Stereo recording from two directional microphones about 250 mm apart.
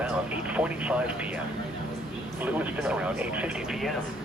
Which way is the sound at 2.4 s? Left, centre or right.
Centre.